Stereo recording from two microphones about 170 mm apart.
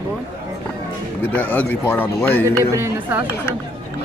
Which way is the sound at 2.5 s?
15° right (ahead or behind).